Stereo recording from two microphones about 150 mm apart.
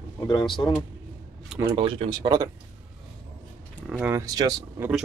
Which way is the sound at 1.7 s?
40° right (ahead or behind).